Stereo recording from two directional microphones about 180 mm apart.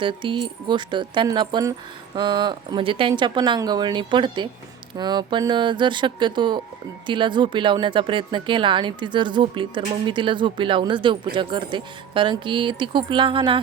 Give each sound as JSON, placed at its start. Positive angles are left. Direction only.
{"t": 0.0, "sound": "speech", "side_deg": -25}